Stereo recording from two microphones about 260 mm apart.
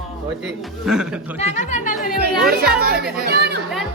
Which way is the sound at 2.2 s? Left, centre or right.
Right.